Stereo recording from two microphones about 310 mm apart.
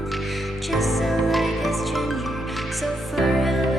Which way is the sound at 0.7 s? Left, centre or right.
Centre.